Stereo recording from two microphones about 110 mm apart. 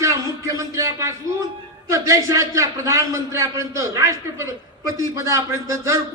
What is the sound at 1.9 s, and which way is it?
A man's voice, 30° right (ahead or behind).